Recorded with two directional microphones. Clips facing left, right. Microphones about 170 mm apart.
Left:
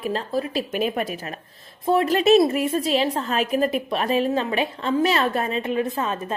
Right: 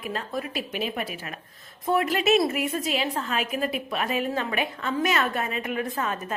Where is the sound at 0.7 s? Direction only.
45° left (ahead or behind).